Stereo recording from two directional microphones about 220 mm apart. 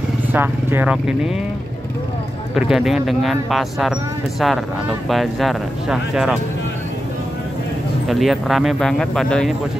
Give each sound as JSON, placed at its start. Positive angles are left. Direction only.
{"t": 0.3, "sound": "speech", "side_deg": -10}
{"t": 2.5, "sound": "speech", "side_deg": 0}
{"t": 8.1, "sound": "speech", "side_deg": 0}